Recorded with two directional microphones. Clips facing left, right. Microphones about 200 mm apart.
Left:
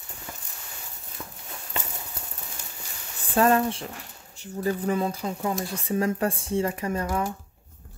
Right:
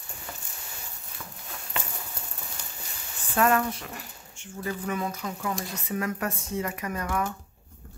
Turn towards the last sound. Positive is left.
turn(degrees=30)  # may be behind; listen again after turning